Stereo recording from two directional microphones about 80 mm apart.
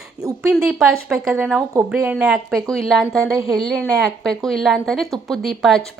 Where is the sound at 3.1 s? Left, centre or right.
Right.